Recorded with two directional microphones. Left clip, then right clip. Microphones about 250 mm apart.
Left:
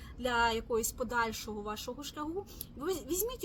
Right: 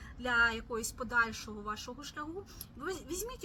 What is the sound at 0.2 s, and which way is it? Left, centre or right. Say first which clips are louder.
A woman's voice: even; centre.